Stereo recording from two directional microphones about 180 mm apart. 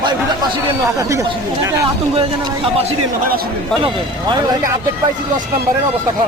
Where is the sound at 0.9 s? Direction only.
15° right (ahead or behind).